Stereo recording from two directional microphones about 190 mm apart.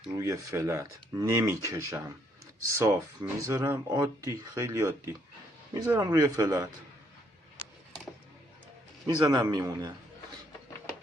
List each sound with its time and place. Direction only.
0.2 s speech: 15° right (ahead or behind)
9.0 s speech: 20° right (ahead or behind)